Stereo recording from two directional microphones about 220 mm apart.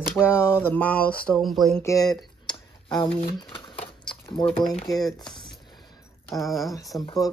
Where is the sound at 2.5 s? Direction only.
20° left (ahead or behind).